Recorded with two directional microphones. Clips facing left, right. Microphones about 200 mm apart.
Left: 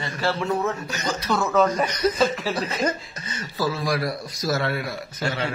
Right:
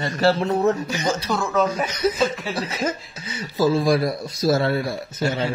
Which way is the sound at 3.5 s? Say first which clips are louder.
Right 7 dB; 25° right (ahead or behind).